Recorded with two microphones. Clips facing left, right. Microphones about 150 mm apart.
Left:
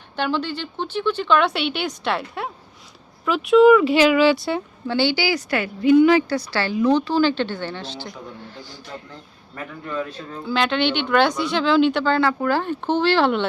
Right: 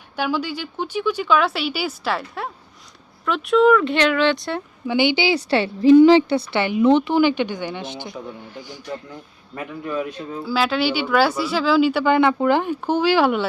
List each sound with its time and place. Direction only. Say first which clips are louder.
0.2 s speech: even; 10° right (ahead or behind)
4.9 s speech: right 2 dB; 15° right (ahead or behind)
10.4 s speech: even; 5° right (ahead or behind)